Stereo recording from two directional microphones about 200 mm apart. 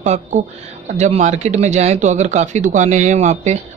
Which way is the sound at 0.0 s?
35° right (ahead or behind).